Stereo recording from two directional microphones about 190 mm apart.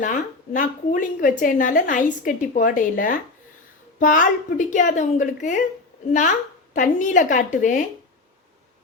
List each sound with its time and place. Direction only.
0.0 s a woman's voice: 45° left (ahead or behind)
6.7 s speech: 40° left (ahead or behind)